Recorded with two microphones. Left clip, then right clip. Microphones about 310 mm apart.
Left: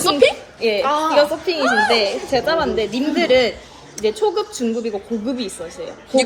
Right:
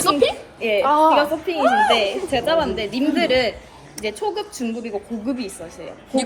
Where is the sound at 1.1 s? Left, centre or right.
Centre.